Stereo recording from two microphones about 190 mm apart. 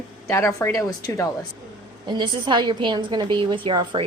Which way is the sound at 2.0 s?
25° right (ahead or behind).